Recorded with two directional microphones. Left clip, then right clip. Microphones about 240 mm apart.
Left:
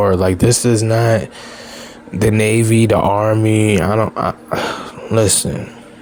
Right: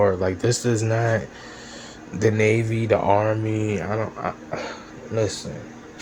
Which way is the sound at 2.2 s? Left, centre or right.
Left.